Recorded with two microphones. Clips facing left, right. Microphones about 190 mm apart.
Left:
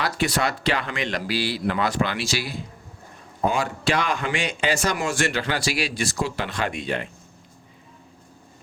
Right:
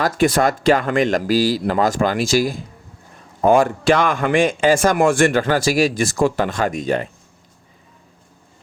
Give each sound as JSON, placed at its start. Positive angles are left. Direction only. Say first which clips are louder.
{"t": 0.0, "sound": "speech", "louder": "right 8 dB", "side_deg": -50}